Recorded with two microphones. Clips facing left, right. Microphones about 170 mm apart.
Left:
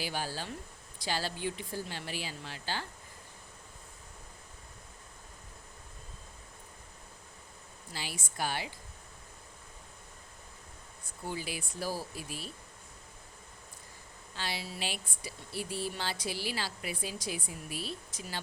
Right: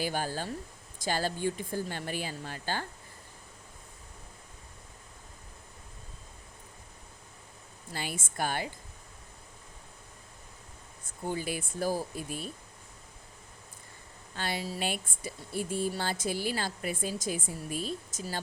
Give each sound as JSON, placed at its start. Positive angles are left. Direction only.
{"t": 0.0, "sound": "speech", "side_deg": -50}
{"t": 7.9, "sound": "speech", "side_deg": -50}
{"t": 11.3, "sound": "speech", "side_deg": -50}
{"t": 14.3, "sound": "speech", "side_deg": -50}